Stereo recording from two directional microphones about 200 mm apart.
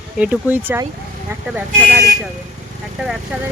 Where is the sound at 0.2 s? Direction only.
10° right (ahead or behind).